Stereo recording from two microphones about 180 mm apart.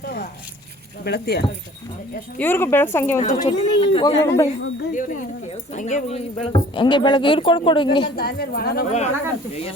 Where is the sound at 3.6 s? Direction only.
30° left (ahead or behind).